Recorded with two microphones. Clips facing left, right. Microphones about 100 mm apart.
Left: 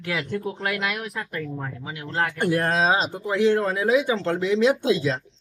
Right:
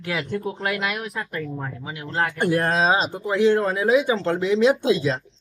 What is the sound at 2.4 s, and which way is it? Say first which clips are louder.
Speech: right 1 dB; 35° right (ahead or behind).